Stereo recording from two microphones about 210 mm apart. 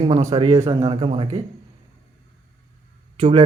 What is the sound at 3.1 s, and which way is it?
Speech, 25° right (ahead or behind).